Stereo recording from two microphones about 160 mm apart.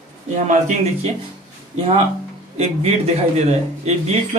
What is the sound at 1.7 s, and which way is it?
Speech, 40° right (ahead or behind).